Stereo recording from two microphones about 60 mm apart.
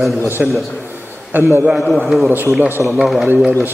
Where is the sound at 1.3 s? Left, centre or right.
Right.